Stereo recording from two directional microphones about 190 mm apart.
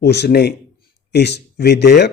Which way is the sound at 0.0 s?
60° left (ahead or behind).